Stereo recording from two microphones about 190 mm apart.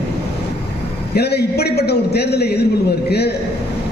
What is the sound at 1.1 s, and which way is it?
A man's voice, 55° left (ahead or behind).